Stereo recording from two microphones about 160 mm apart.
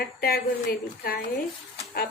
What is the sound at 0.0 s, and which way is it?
A woman's voice, 70° left (ahead or behind).